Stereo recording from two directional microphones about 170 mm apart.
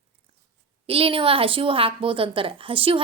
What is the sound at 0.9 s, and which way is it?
A woman's voice, 35° right (ahead or behind).